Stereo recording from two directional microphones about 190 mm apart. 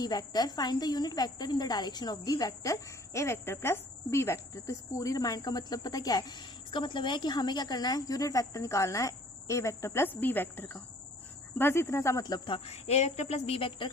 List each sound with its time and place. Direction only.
0.0 s a woman's voice: 20° left (ahead or behind)